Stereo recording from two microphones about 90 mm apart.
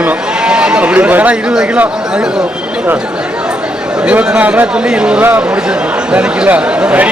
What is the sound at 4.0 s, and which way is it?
Speech, 10° right (ahead or behind).